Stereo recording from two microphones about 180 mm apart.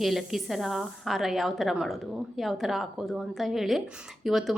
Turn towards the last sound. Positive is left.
turn(degrees=0)  # may be behind; listen again after turning